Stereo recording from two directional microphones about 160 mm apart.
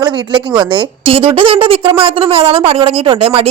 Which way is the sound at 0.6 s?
30° right (ahead or behind).